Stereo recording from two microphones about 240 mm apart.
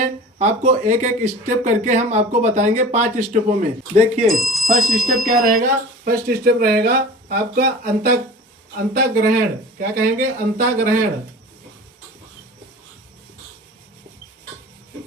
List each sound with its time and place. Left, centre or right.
0.0 s speech: right
4.3 s speech: centre
5.2 s speech: right